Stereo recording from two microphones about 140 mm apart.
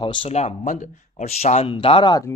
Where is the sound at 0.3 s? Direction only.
50° left (ahead or behind).